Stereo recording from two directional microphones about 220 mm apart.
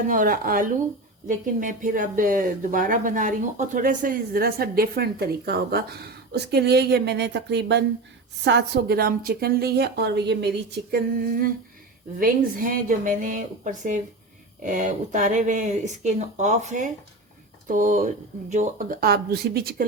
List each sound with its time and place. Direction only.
0.1 s speech: 40° right (ahead or behind)